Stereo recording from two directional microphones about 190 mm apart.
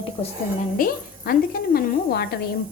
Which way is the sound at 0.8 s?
50° left (ahead or behind).